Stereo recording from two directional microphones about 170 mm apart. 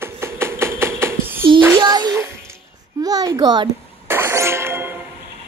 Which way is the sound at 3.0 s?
20° right (ahead or behind).